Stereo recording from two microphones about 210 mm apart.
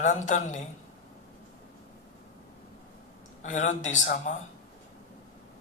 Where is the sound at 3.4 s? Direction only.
35° left (ahead or behind).